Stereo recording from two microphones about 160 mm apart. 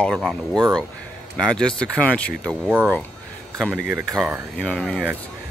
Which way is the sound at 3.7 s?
10° right (ahead or behind).